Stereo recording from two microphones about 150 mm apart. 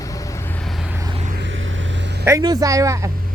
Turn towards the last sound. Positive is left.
turn(degrees=-20)  # may be behind; listen again after turning